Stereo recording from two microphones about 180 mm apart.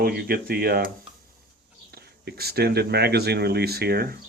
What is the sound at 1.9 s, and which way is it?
Speech, 60° right (ahead or behind).